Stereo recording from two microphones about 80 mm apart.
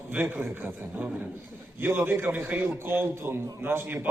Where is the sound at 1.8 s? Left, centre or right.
Right.